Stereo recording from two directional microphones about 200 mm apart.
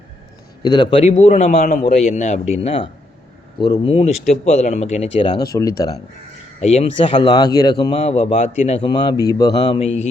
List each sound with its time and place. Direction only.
0.6 s a man's voice: 20° left (ahead or behind)
1.6 s a man's voice: 45° left (ahead or behind)
5.5 s speech: 15° left (ahead or behind)
6.6 s a man's voice: 30° left (ahead or behind)